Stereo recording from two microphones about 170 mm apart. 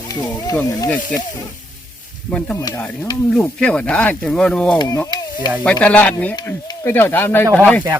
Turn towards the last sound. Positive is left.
turn(degrees=10)  # may be behind; listen again after turning